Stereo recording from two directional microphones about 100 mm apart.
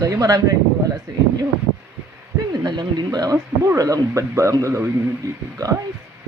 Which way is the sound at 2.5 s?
45° right (ahead or behind).